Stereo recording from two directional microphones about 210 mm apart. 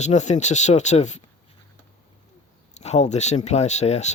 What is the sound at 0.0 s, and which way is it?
Speech, 35° left (ahead or behind).